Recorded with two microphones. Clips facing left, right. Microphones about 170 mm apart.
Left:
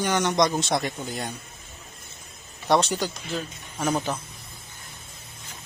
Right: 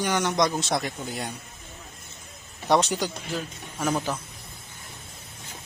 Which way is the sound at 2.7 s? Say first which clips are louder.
Even; 10° right (ahead or behind).